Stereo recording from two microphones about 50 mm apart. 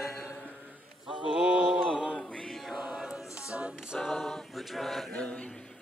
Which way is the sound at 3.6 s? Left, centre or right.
Centre.